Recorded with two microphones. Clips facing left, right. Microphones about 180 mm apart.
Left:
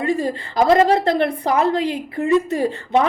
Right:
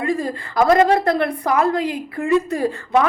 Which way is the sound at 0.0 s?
25° left (ahead or behind).